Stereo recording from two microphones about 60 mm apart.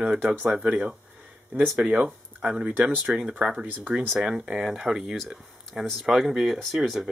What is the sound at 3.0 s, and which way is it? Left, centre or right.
Speech, centre.